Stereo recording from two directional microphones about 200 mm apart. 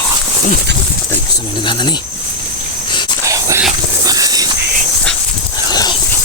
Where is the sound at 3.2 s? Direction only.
15° right (ahead or behind).